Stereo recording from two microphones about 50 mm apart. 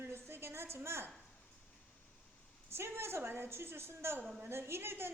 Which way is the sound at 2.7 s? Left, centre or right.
Right.